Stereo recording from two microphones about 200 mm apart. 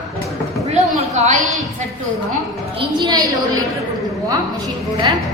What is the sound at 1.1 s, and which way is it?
Speech, 35° right (ahead or behind).